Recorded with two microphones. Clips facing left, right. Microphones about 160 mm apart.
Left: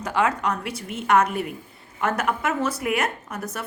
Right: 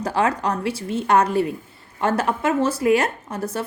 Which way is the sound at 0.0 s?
35° right (ahead or behind).